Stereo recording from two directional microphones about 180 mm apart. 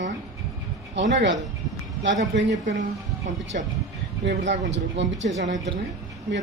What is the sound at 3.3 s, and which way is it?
Speech, 40° right (ahead or behind).